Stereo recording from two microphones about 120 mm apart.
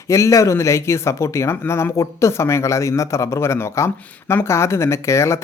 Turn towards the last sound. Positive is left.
turn(degrees=25)  # may be behind; listen again after turning